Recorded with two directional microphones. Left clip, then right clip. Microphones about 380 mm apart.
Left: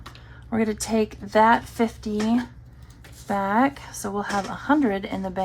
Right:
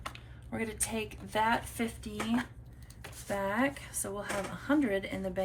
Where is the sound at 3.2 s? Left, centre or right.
Centre.